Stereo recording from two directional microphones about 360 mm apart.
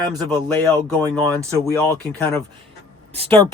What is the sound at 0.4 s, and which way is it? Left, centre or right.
Speech, centre.